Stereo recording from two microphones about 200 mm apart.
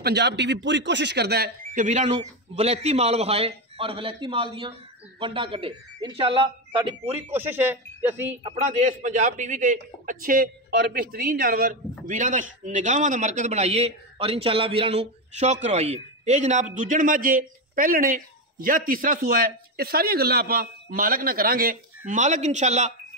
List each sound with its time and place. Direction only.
0.0 s a man's voice: 55° right (ahead or behind); by 7.2 s 30° right (ahead or behind)
7.2 s speech: 10° right (ahead or behind)
8.5 s a man's voice: 40° right (ahead or behind)